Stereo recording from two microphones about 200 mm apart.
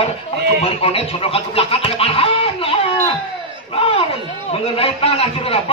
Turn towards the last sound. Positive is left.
turn(degrees=30)  # may be behind; listen again after turning